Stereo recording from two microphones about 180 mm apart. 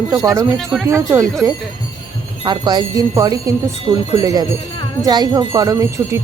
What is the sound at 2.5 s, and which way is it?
Speech, 20° right (ahead or behind).